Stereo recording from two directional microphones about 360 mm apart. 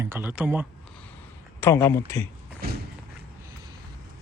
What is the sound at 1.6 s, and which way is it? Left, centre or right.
Speech, centre.